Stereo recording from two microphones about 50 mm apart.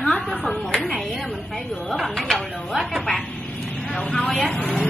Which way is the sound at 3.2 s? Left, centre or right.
Left.